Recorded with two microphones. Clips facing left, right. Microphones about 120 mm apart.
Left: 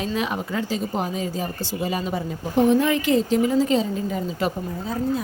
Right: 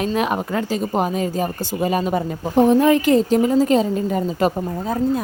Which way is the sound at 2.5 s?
40° right (ahead or behind).